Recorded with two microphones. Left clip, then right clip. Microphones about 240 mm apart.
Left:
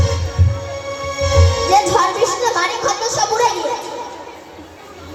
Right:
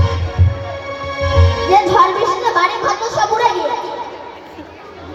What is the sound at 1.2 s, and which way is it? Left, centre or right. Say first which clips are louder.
Music: even; left.